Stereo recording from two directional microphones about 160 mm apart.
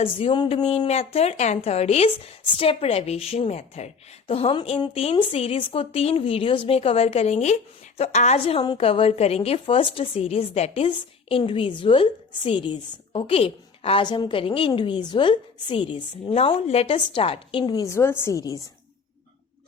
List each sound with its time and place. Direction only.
0.0 s a woman's voice: 35° left (ahead or behind)